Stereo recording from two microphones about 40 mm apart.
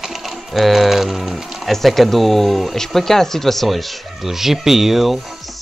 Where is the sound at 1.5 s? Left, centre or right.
Centre.